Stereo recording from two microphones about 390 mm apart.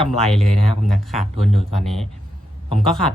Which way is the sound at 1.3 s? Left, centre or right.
Left.